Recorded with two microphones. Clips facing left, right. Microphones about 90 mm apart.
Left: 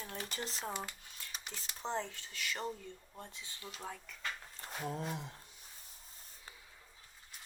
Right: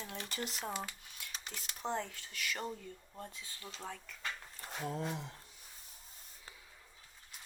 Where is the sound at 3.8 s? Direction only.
10° left (ahead or behind).